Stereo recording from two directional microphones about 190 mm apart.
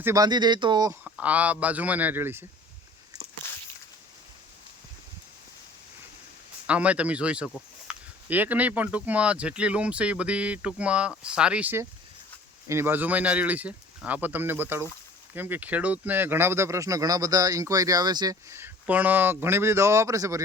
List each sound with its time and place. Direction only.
0.0 s speech: 20° right (ahead or behind)
1.0 s speech: 5° right (ahead or behind)
6.7 s speech: 5° right (ahead or behind)